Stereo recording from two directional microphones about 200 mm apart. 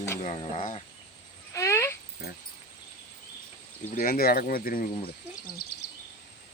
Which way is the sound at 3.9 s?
50° left (ahead or behind).